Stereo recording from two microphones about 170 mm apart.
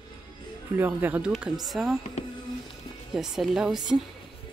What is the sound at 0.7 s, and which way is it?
Speech, 10° right (ahead or behind).